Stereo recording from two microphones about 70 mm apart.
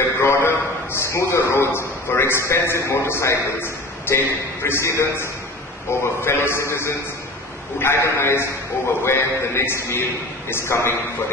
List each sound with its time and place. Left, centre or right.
0.2 s a man's voice: left
3.6 s a sound: left
4.6 s a man's voice: left